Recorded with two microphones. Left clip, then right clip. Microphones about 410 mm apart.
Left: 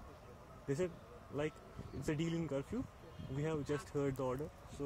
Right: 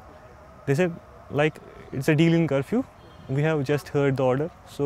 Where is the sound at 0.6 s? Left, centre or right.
Right.